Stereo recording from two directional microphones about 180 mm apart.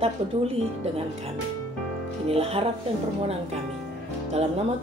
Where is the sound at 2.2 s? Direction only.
35° right (ahead or behind).